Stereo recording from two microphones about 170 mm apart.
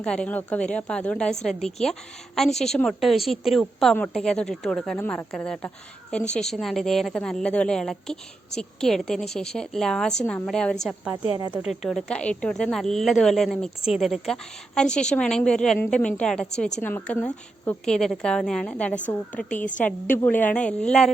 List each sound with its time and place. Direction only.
0.0 s a woman's voice: 5° left (ahead or behind)
11.2 s speech: 25° right (ahead or behind)
11.5 s a woman's voice: 5° right (ahead or behind)